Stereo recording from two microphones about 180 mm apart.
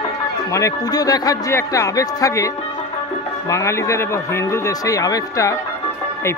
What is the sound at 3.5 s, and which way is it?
A man's voice, 15° left (ahead or behind).